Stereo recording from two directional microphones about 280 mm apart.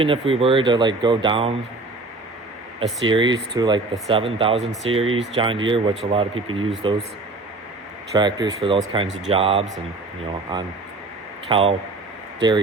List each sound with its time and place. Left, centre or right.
0.0 s speech: centre
2.8 s speech: centre
4.6 s speech: centre
4.9 s speech: centre
8.1 s speech: centre
11.4 s speech: centre